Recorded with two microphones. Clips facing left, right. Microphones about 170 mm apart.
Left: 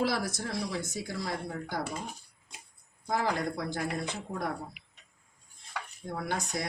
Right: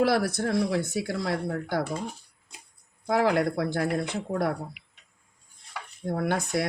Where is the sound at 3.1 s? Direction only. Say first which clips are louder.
Right 7 dB; 65° right (ahead or behind).